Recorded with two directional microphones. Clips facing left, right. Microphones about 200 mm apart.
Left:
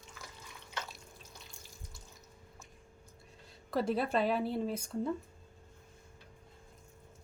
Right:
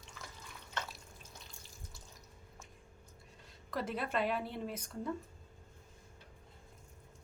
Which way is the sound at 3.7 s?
30° left (ahead or behind).